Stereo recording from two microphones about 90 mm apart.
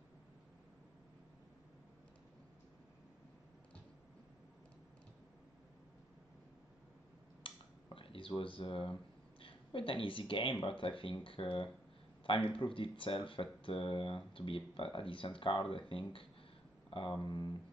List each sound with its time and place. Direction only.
7.4 s a sound: 75° left (ahead or behind)
9.4 s speech: 80° left
17.2 s speech: 50° left (ahead or behind)